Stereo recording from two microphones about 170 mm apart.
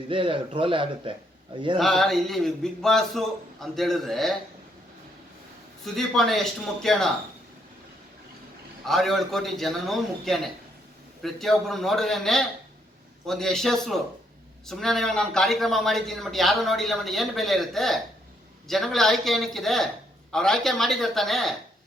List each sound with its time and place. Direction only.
0.1 s speech: 30° right (ahead or behind)
1.8 s a man's voice: centre (ahead or behind)
5.8 s a man's voice: centre (ahead or behind)
8.9 s a man's voice: centre (ahead or behind)